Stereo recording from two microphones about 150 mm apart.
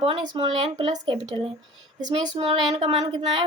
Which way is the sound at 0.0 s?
35° right (ahead or behind).